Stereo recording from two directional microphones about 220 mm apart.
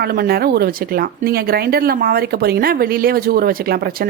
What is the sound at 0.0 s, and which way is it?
Speech, 45° right (ahead or behind).